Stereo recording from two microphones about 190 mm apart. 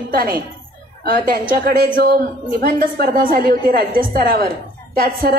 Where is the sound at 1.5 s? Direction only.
45° right (ahead or behind).